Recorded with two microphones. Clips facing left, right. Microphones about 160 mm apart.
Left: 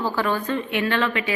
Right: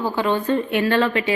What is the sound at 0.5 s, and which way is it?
Speech, 35° right (ahead or behind).